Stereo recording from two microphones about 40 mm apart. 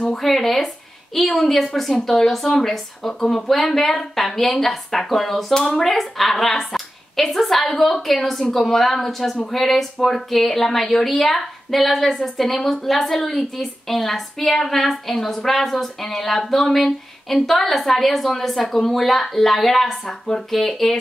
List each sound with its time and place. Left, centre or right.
0.2 s a woman's voice: centre
5.6 s a woman's voice: centre
5.9 s a woman's voice: centre